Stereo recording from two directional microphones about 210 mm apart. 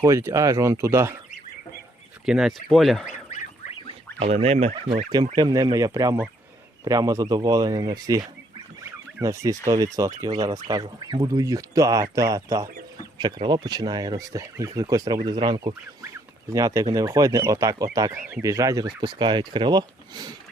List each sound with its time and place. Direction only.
0.0 s speech: 15° right (ahead or behind)
2.2 s speech: 5° right (ahead or behind)
3.1 s a sound: 30° left (ahead or behind)
4.2 s speech: 30° right (ahead or behind)
8.8 s fowl: 15° right (ahead or behind)
9.6 s speech: 15° right (ahead or behind)